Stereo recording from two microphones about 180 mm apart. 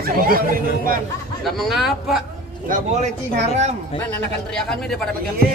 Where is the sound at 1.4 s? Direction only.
Centre (ahead or behind).